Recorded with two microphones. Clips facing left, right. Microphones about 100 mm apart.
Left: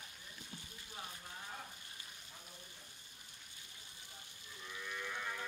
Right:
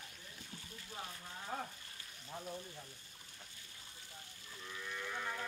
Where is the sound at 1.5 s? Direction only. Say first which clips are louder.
Right 10 dB; 45° right (ahead or behind).